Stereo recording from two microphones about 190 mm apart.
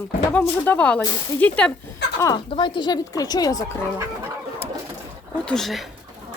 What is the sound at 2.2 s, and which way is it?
Speech, 20° left (ahead or behind).